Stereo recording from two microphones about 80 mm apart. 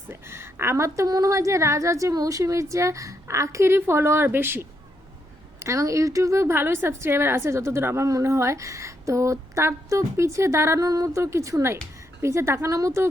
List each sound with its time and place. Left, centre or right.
0.1 s speech: right
1.0 s speech: right
5.5 s speech: right
10.8 s a woman's voice: right